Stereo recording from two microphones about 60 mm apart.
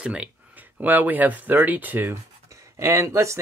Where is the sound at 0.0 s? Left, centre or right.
Centre.